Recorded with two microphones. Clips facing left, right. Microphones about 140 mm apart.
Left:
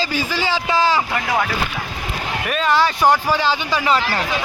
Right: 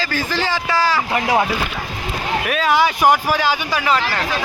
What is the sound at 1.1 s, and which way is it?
Speech, 25° right (ahead or behind).